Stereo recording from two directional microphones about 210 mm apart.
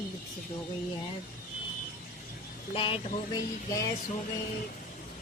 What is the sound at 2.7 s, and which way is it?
Speech, 25° left (ahead or behind).